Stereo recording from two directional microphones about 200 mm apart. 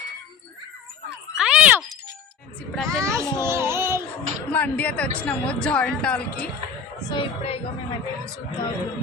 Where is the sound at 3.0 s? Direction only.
15° right (ahead or behind).